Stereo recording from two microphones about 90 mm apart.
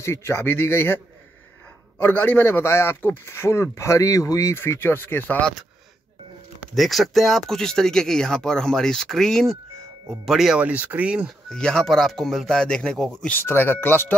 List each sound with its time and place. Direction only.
0.0 s a man's voice: 30° left (ahead or behind)
6.7 s speech: centre (ahead or behind)
10.6 s speech: 15° right (ahead or behind)
11.4 s speech: 10° left (ahead or behind)
13.3 s a man's voice: 25° left (ahead or behind)